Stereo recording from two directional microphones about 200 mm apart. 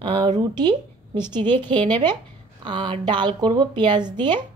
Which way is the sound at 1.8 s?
25° right (ahead or behind).